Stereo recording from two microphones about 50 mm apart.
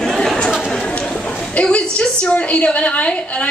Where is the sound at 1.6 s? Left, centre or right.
Left.